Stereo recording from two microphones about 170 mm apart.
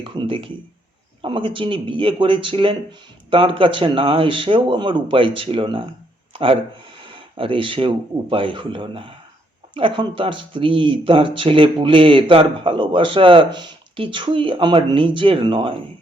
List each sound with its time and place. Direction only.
0.0 s speech: 30° right (ahead or behind)